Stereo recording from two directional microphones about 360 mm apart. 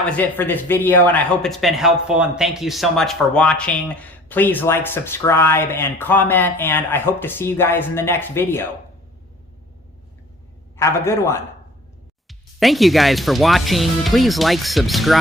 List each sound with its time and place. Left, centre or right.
0.0 s speech: centre
10.8 s a man's voice: centre